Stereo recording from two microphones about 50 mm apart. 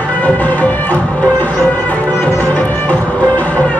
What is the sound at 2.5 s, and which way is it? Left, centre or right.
Music, left.